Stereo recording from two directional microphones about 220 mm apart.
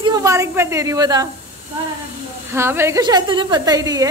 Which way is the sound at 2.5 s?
10° right (ahead or behind).